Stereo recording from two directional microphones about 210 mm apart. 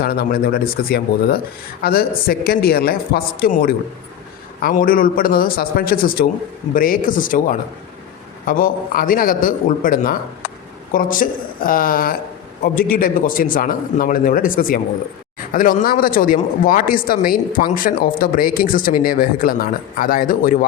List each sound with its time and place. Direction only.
0.0 s speech: 45° left (ahead or behind)